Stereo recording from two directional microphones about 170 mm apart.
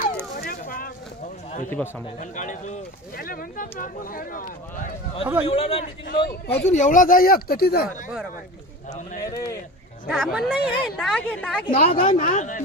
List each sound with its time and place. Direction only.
0.4 s a sound: 55° left (ahead or behind)
1.8 s a woman's voice: centre (ahead or behind)
2.1 s speech: 45° left (ahead or behind)
3.2 s speech: 60° left (ahead or behind)
5.5 s speech: 35° left (ahead or behind)
6.1 s speech: 75° left (ahead or behind)
6.5 s speech: 45° left (ahead or behind); by 7.9 s 65° left (ahead or behind)
9.2 s speech: 20° left (ahead or behind)
10.0 s a woman's voice: centre (ahead or behind)
11.1 s a woman's voice: 5° left (ahead or behind)
11.7 s speech: 35° left (ahead or behind)
12.2 s speech: 45° left (ahead or behind)